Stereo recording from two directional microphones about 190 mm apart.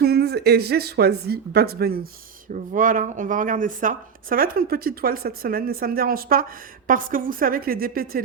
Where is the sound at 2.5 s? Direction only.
45° right (ahead or behind).